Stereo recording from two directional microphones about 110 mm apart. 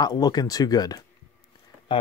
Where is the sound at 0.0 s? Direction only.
35° left (ahead or behind).